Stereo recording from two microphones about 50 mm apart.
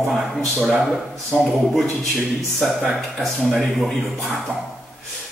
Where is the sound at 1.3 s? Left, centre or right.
Centre.